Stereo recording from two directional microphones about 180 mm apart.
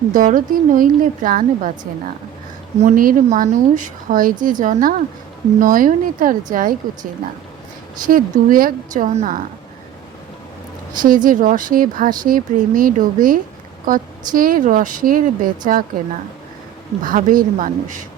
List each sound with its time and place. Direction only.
0.1 s speech: 50° right (ahead or behind)
2.8 s speech: 50° right (ahead or behind)
11.0 s speech: 50° right (ahead or behind)
17.0 s speech: 50° right (ahead or behind)